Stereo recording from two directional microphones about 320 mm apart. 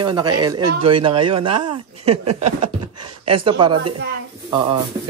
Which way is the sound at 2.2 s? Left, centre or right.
Right.